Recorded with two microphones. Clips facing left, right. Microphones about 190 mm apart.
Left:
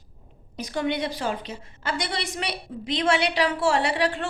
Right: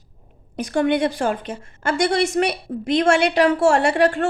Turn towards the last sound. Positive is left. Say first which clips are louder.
# right 7 dB
turn(degrees=-50)  # may be behind; listen again after turning